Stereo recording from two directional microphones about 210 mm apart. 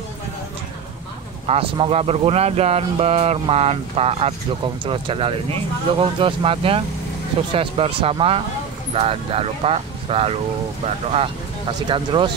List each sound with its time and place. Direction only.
1.5 s speech: 30° right (ahead or behind)
11.9 s speech: 25° right (ahead or behind)